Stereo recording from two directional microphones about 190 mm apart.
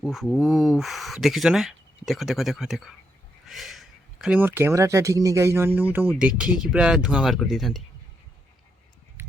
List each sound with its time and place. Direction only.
0.0 s speech: centre (ahead or behind)